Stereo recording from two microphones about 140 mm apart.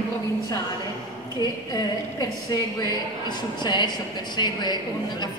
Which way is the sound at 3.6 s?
30° left (ahead or behind).